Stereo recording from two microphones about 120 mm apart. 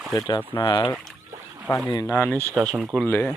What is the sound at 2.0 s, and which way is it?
Speech, 20° left (ahead or behind).